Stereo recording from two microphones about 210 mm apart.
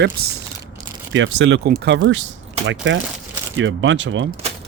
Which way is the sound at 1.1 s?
60° right (ahead or behind).